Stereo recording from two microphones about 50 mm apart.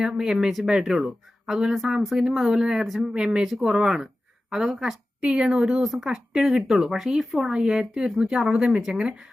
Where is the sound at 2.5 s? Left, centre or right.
Centre.